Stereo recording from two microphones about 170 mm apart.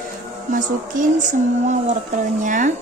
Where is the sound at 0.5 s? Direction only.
50° right (ahead or behind).